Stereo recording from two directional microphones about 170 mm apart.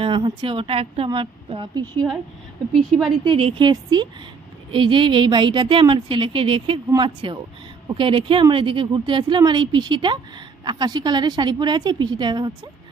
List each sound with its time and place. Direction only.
0.0 s speech: 30° right (ahead or behind)
3.3 s speech: 30° right (ahead or behind)